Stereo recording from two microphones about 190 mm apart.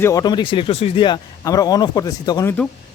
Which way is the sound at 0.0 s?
20° left (ahead or behind).